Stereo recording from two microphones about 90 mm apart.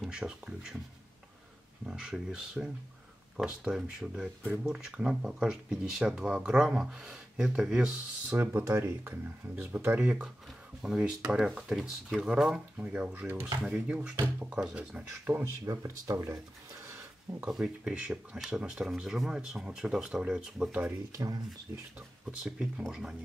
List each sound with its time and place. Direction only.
0.0 s speech: 10° right (ahead or behind)
1.9 s speech: 5° right (ahead or behind)
8.4 s speech: 25° right (ahead or behind)
9.9 s speech: 10° right (ahead or behind)
13.7 s speech: 10° right (ahead or behind)
15.3 s speech: 40° right (ahead or behind)
17.4 s speech: 10° right (ahead or behind)
22.2 s speech: 10° right (ahead or behind)